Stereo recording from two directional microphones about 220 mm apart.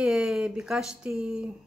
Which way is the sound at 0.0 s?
5° right (ahead or behind).